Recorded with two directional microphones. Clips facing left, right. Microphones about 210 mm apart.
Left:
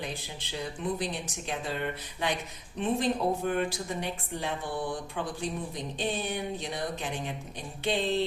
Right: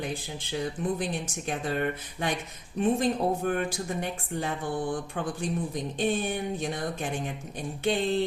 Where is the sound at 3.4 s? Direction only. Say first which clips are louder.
Right 1 dB; 50° right (ahead or behind).